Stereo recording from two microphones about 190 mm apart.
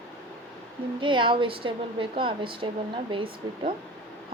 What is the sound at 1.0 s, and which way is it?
A woman's voice, 25° right (ahead or behind).